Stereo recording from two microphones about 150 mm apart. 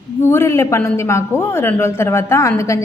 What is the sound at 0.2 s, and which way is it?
A woman's voice, 15° left (ahead or behind).